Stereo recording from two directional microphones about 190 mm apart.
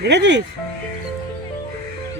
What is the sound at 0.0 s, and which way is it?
Speech, 65° right (ahead or behind).